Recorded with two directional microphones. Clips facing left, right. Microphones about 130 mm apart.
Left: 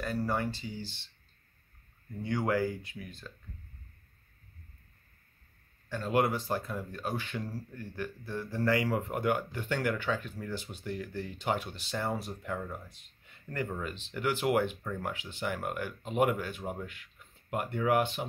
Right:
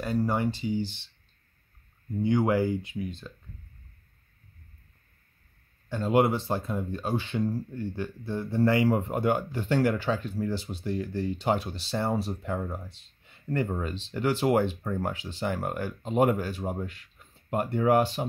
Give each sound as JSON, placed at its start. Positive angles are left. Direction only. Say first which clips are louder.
{"t": 0.0, "sound": "speech", "louder": "right 5 dB", "side_deg": -20}
{"t": 2.2, "sound": "speech", "louder": "right 6 dB", "side_deg": -20}
{"t": 5.9, "sound": "speech", "louder": "right 5 dB", "side_deg": -25}